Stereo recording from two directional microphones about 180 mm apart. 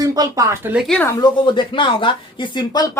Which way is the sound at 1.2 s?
25° left (ahead or behind).